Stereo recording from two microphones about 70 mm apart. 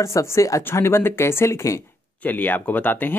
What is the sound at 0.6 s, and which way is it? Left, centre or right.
Speech, left.